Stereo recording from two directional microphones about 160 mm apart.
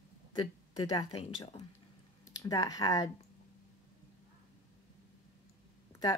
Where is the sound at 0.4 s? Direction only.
25° left (ahead or behind).